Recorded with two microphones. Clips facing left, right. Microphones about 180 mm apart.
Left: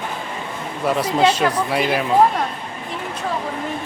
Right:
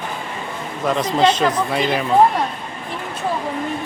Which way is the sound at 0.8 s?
10° left (ahead or behind).